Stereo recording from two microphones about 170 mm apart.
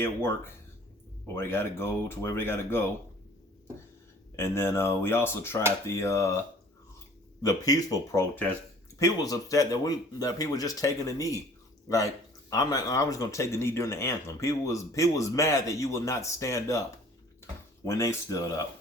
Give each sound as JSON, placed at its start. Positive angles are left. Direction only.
{"t": 0.0, "sound": "speech", "side_deg": 15}
{"t": 4.4, "sound": "speech", "side_deg": 15}
{"t": 7.4, "sound": "speech", "side_deg": 20}
{"t": 12.5, "sound": "speech", "side_deg": 20}
{"t": 17.8, "sound": "speech", "side_deg": 15}